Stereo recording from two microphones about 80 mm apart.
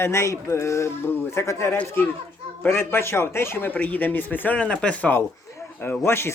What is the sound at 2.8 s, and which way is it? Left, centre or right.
Speech, left.